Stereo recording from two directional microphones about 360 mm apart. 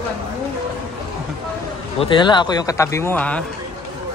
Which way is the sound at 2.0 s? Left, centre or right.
Centre.